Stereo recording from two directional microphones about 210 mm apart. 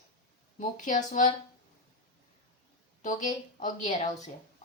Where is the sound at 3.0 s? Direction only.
35° left (ahead or behind).